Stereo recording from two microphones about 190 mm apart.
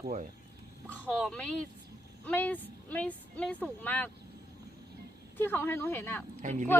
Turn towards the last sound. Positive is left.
turn(degrees=-40)  # may be behind; listen again after turning